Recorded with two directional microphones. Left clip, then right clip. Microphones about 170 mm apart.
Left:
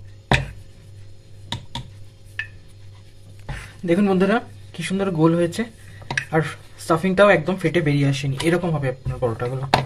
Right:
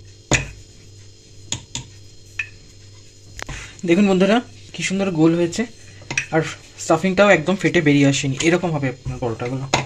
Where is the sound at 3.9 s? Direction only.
15° right (ahead or behind).